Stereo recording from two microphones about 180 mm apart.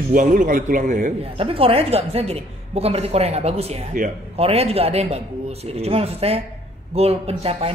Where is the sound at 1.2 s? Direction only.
30° right (ahead or behind).